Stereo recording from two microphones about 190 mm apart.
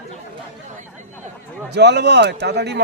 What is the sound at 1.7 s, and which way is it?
A man's voice, 60° right (ahead or behind).